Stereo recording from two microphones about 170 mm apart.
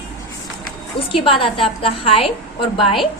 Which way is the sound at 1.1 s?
30° left (ahead or behind).